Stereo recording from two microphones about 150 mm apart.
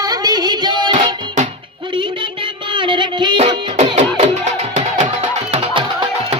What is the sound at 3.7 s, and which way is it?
Music, 45° right (ahead or behind).